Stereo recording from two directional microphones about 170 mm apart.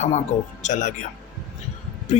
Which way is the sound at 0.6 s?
45° left (ahead or behind).